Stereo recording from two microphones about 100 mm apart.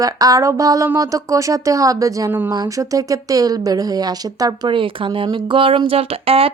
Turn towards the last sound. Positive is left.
turn(degrees=-75)  # may be behind; listen again after turning